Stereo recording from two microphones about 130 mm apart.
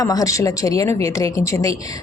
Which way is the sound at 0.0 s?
30° left (ahead or behind).